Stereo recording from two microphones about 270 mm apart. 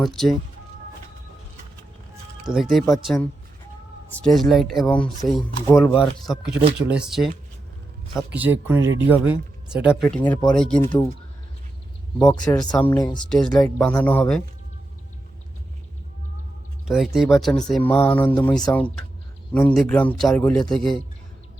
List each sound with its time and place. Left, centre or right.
0.0 s speech: centre
2.5 s speech: centre
12.2 s speech: centre
13.2 s speech: centre
16.8 s speech: centre